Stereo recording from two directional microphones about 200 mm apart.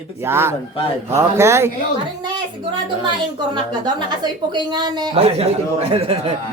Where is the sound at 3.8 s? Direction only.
20° right (ahead or behind).